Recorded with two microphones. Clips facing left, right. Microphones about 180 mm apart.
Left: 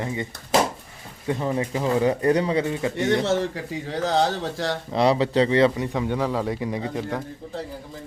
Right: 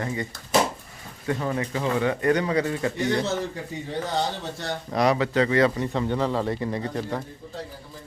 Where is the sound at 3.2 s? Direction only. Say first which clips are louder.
Left 4 dB; 90° left.